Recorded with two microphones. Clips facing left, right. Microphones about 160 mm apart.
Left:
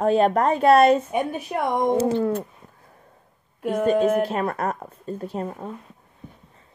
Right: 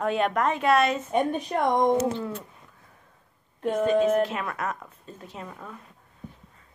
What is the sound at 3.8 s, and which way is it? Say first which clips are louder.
A woman's voice: left 2 dB; 40° left (ahead or behind).